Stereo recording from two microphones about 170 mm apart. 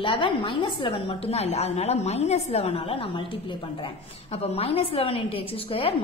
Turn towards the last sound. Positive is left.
turn(degrees=35)  # may be behind; listen again after turning